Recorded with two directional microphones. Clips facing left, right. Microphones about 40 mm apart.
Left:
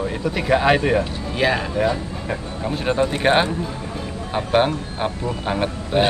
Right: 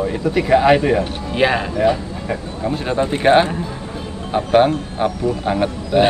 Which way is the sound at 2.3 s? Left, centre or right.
Centre.